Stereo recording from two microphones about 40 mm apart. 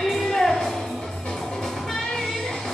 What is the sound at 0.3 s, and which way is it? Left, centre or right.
Music, centre.